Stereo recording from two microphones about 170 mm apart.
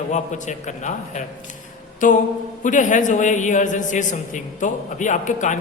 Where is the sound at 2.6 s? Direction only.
50° left (ahead or behind).